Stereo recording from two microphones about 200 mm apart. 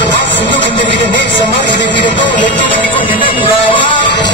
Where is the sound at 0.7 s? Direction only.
25° left (ahead or behind).